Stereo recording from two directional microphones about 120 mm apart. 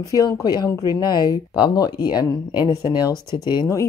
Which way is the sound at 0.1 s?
30° left (ahead or behind).